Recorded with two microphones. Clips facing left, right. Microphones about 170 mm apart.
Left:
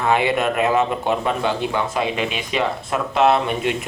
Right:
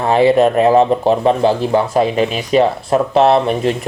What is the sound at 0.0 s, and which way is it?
Speech, 35° right (ahead or behind).